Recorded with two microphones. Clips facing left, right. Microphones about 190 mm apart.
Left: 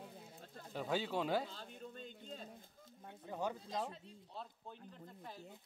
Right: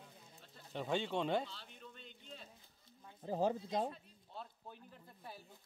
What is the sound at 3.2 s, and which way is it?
Speech, 35° right (ahead or behind).